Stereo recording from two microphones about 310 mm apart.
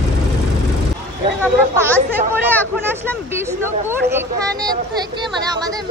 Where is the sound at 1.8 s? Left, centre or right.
Centre.